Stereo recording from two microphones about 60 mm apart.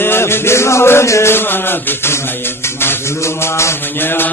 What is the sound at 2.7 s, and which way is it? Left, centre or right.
Mantra, left.